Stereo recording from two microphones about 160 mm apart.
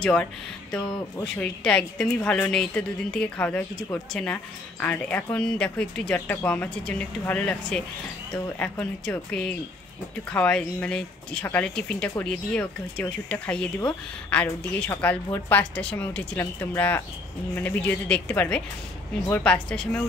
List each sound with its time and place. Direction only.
0.0 s a woman's voice: 5° left (ahead or behind)